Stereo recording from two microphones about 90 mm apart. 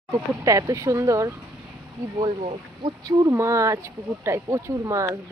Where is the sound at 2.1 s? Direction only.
90° right.